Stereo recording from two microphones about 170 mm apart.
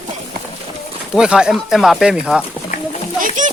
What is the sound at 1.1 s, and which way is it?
A child's voice, 5° right (ahead or behind).